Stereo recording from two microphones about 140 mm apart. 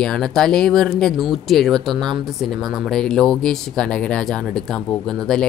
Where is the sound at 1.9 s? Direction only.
30° right (ahead or behind).